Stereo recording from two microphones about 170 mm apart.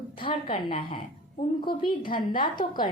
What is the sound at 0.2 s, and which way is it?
A woman's voice, 30° left (ahead or behind).